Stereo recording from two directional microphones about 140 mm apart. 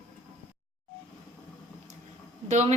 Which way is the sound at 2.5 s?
55° right (ahead or behind).